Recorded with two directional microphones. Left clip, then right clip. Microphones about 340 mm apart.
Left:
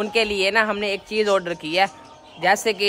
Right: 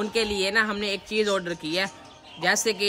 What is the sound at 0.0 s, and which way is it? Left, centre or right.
A woman's voice, centre.